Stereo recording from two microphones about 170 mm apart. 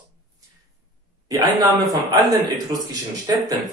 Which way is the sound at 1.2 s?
20° right (ahead or behind).